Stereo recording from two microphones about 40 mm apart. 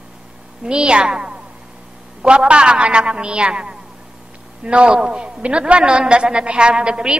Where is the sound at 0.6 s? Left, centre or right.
Right.